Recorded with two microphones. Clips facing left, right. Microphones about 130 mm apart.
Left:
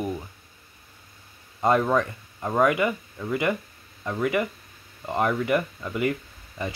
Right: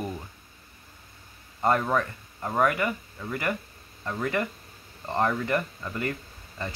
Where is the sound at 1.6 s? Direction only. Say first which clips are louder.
Left 3 dB; 15° left (ahead or behind).